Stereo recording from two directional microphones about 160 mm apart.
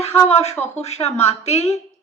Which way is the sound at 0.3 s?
40° left (ahead or behind).